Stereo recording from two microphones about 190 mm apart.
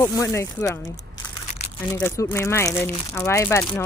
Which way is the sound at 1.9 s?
15° left (ahead or behind).